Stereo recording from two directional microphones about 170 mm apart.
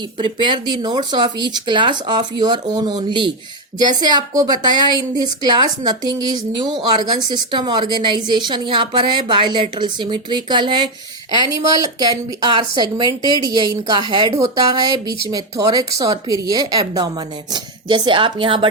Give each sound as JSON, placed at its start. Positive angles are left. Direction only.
{"t": 0.2, "sound": "speech", "side_deg": -30}